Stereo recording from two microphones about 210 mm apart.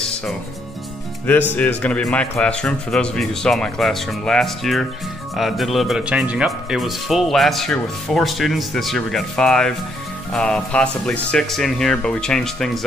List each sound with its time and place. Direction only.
1.5 s speech: 5° left (ahead or behind)